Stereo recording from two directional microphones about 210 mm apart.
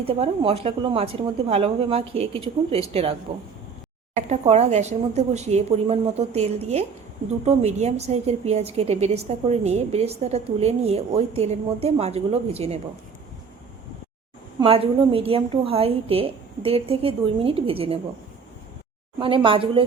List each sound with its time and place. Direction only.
0.0 s a woman's voice: 25° right (ahead or behind)
14.6 s a woman's voice: 25° right (ahead or behind)
19.2 s a woman's voice: 25° right (ahead or behind)